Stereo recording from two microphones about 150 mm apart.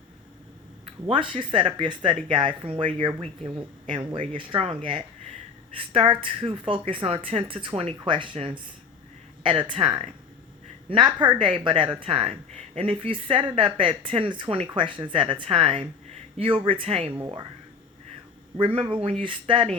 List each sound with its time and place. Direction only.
1.1 s a woman's voice: 35° right (ahead or behind)
17.2 s speech: 25° right (ahead or behind)
18.5 s a woman's voice: 35° right (ahead or behind)